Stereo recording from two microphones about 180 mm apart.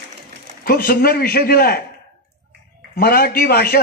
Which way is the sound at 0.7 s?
55° left (ahead or behind).